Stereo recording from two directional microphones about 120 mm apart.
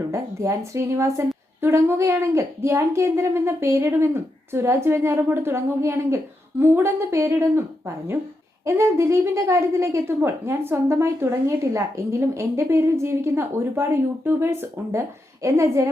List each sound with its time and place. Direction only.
0.1 s a woman's voice: 25° right (ahead or behind)
8.6 s a woman's voice: 25° right (ahead or behind)